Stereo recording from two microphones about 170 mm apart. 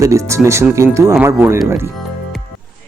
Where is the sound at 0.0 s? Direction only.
20° right (ahead or behind).